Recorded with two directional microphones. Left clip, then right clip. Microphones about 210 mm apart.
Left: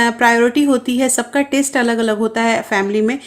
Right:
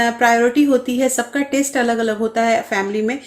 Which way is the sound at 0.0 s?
50° left (ahead or behind).